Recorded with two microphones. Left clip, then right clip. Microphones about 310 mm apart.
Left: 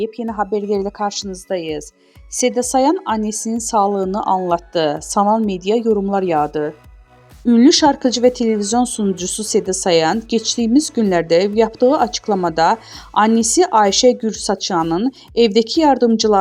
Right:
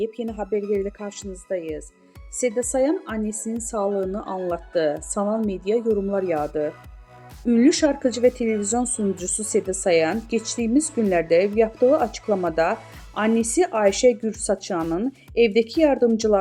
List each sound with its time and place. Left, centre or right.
0.5 s a woman's voice: left